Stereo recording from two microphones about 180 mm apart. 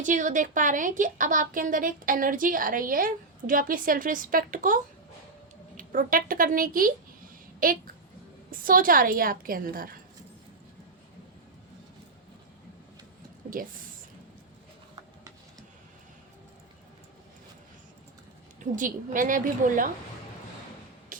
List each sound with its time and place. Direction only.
0.0 s a woman's voice: 45° right (ahead or behind)
13.5 s a woman's voice: 50° right (ahead or behind)
18.6 s a woman's voice: 45° right (ahead or behind)
21.1 s a sound: 50° right (ahead or behind)